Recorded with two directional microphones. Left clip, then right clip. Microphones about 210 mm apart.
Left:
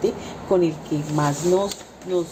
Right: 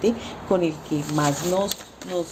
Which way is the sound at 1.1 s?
40° right (ahead or behind).